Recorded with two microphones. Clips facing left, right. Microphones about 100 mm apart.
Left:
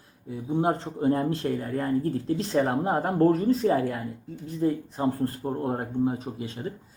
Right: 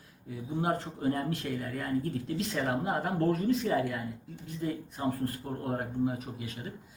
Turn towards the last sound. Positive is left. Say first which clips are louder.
# left 7 dB
turn(degrees=30)  # may be behind; listen again after turning